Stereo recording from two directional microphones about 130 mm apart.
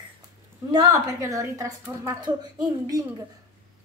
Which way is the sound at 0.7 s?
30° right (ahead or behind).